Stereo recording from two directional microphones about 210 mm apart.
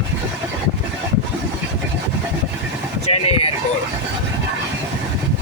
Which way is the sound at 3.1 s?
30° left (ahead or behind).